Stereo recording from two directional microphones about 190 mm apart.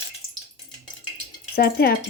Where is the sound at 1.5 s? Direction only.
55° left (ahead or behind).